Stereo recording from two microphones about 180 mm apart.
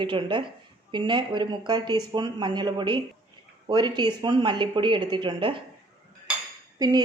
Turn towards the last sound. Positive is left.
turn(degrees=-20)  # may be behind; listen again after turning